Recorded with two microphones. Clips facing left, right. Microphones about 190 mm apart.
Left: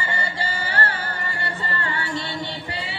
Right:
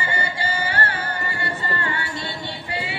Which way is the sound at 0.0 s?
35° left (ahead or behind).